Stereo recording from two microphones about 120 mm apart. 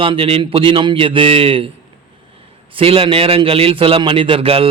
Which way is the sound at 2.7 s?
50° right (ahead or behind).